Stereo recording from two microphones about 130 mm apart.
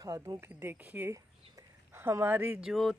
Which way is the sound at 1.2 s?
20° right (ahead or behind).